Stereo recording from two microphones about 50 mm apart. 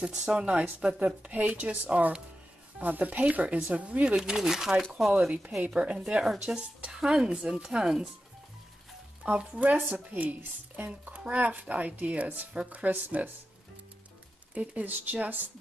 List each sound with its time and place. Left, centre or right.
0.0 s speech: centre
4.2 s speech: centre
5.6 s speech: right
9.2 s speech: centre; by 13.3 s right
14.5 s speech: right